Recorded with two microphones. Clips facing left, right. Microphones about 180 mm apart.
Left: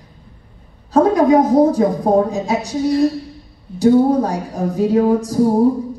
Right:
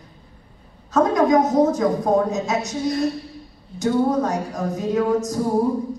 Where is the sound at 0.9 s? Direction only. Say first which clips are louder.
Left 4 dB; 30° left (ahead or behind).